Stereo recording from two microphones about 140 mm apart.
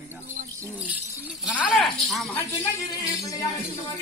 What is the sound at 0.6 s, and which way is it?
Speech, 10° right (ahead or behind).